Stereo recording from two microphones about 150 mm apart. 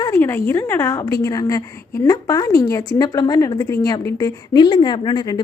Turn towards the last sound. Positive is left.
turn(degrees=30)  # may be behind; listen again after turning